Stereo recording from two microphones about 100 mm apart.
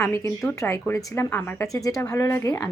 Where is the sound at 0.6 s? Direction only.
20° left (ahead or behind).